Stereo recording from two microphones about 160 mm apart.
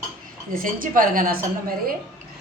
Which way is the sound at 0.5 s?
60° right (ahead or behind).